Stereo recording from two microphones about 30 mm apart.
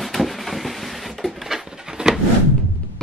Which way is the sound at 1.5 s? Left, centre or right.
Right.